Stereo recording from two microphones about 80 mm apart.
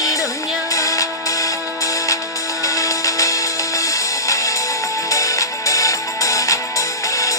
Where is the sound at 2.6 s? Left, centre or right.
Left.